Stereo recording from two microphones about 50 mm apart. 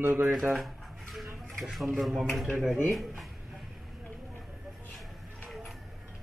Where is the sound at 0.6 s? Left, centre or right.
Centre.